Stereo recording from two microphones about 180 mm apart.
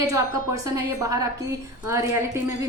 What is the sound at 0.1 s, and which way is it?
A woman's voice, 20° right (ahead or behind).